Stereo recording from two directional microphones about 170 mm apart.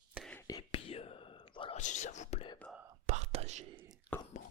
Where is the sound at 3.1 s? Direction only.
40° right (ahead or behind).